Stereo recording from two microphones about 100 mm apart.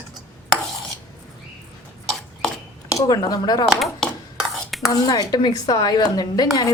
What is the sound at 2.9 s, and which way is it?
Speech, 40° left (ahead or behind).